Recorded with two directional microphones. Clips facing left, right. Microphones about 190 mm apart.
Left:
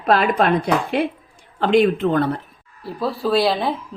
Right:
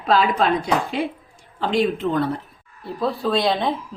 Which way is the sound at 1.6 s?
60° left (ahead or behind).